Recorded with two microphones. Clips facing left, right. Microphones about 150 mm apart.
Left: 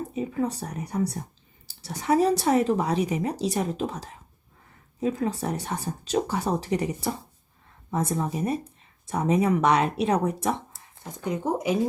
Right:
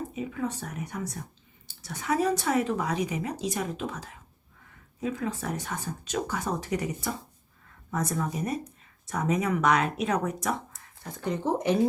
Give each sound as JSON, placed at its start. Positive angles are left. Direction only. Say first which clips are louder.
{"t": 0.1, "sound": "speech", "louder": "left 4 dB", "side_deg": 35}
{"t": 11.0, "sound": "speech", "louder": "left 1 dB", "side_deg": 15}